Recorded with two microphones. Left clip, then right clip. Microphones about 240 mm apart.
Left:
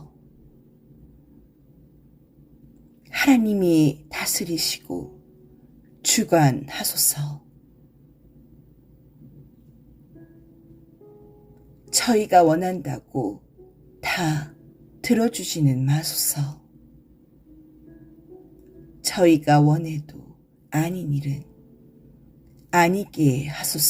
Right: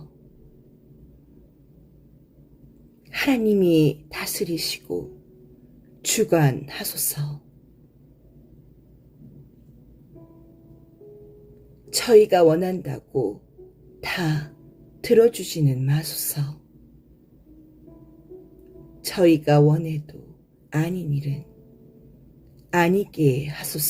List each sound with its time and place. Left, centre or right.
3.1 s a sound: left
3.4 s speech: left
11.9 s speech: left
14.0 s throat clearing: left
15.0 s speech: left
19.0 s speech: left
22.7 s speech: left